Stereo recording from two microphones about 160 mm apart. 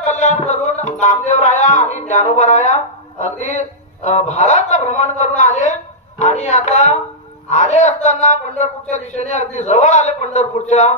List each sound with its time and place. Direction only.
0.0 s music: 45° left (ahead or behind)